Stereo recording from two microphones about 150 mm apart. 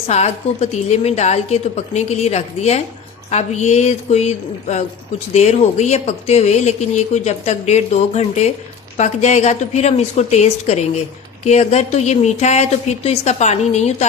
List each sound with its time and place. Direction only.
0.1 s speech: 45° left (ahead or behind)